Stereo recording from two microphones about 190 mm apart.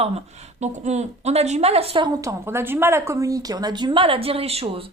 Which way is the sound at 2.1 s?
15° right (ahead or behind).